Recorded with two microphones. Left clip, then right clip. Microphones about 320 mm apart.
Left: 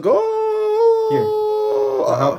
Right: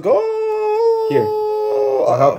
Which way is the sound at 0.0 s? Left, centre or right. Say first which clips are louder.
Even; centre.